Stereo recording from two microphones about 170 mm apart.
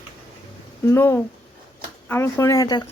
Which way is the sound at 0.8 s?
15° left (ahead or behind).